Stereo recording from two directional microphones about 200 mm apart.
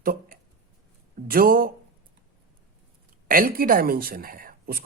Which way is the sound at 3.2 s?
45° right (ahead or behind).